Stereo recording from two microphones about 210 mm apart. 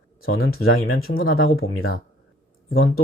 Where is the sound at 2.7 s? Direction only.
80° left.